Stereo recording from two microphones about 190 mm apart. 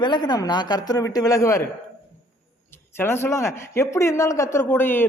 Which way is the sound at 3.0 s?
10° left (ahead or behind).